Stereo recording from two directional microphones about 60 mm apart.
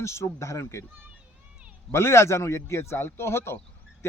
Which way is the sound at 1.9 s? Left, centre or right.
Left.